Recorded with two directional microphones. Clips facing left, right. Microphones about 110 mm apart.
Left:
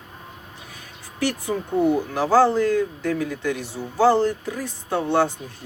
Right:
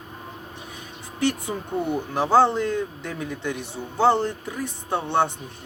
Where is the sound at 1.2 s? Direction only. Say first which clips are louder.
Left 1 dB; 20° right (ahead or behind).